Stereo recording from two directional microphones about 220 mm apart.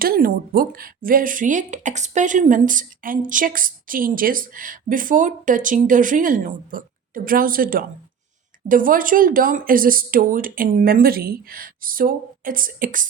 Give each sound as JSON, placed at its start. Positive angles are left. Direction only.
{"t": 0.0, "sound": "speech", "side_deg": -40}